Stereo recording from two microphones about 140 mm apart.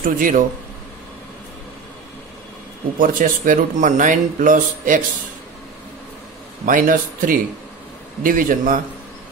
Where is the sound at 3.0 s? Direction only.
70° right (ahead or behind).